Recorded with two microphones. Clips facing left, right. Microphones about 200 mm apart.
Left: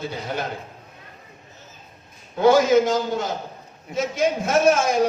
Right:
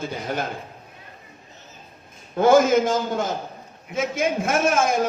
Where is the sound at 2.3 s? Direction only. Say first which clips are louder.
Even; 50° right (ahead or behind).